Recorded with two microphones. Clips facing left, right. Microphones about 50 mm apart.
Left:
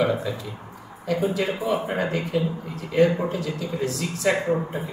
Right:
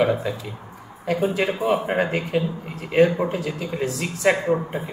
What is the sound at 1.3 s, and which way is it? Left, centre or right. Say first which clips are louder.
Speech: right 3 dB; right.